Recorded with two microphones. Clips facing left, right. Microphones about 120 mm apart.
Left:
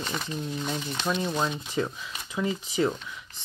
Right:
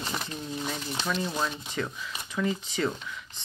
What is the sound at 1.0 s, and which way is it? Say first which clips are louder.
Speech: left 3 dB; 20° left (ahead or behind).